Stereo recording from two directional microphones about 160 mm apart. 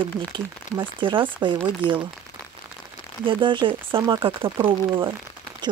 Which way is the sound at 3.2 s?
30° right (ahead or behind).